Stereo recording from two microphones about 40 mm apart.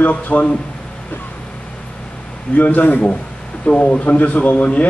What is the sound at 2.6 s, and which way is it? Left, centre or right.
Speech, left.